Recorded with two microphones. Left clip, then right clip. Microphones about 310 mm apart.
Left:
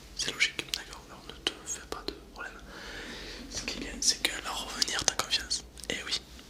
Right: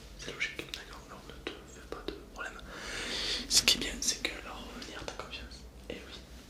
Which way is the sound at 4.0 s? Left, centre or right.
Centre.